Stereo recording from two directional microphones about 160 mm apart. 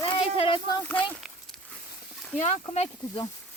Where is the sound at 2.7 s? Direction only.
40° left (ahead or behind).